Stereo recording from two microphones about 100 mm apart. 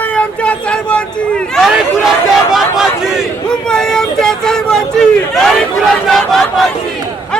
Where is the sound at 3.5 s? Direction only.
5° left (ahead or behind).